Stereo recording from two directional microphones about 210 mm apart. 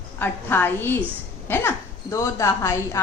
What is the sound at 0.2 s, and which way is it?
A woman's voice, 10° left (ahead or behind).